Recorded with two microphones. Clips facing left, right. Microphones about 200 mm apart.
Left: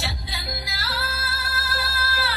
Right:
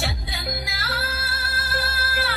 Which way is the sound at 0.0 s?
50° right (ahead or behind).